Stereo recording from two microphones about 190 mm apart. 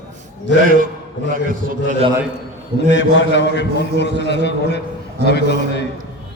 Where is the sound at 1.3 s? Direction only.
45° right (ahead or behind).